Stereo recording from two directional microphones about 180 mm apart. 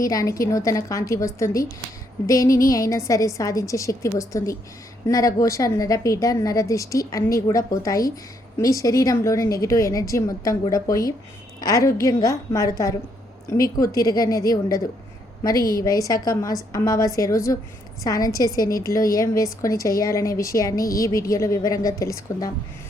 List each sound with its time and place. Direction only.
0.0 s a woman's voice: 20° left (ahead or behind)
15.8 s a woman's voice: 20° left (ahead or behind)